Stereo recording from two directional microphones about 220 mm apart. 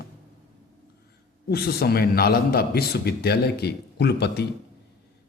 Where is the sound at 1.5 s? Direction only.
45° left (ahead or behind).